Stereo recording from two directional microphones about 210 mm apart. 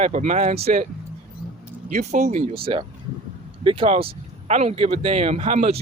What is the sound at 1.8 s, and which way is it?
Speech, 35° right (ahead or behind).